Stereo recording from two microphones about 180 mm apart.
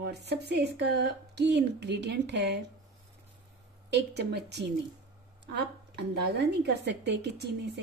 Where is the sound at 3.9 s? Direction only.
70° right (ahead or behind).